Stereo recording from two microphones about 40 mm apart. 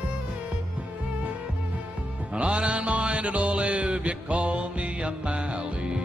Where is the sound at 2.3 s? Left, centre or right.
Right.